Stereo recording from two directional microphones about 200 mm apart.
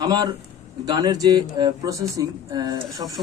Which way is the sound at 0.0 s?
20° right (ahead or behind).